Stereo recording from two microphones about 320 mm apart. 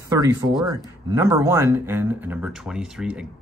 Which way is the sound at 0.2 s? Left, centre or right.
Centre.